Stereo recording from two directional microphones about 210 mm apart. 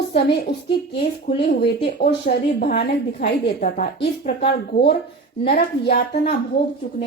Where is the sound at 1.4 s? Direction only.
50° left (ahead or behind).